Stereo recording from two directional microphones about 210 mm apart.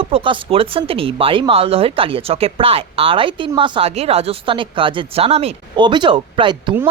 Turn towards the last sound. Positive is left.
turn(degrees=-25)  # may be behind; listen again after turning